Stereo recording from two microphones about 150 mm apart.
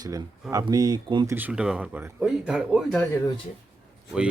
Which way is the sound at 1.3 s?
10° right (ahead or behind).